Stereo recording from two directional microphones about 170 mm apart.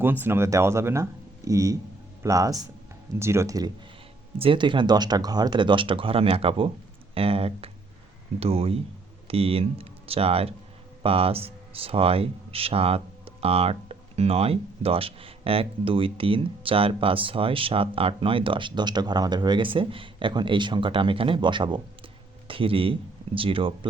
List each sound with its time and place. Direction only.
0.0 s speech: 10° right (ahead or behind)
4.4 s speech: 30° right (ahead or behind)